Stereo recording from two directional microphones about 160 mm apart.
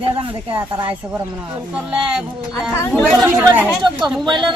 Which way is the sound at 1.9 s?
5° right (ahead or behind).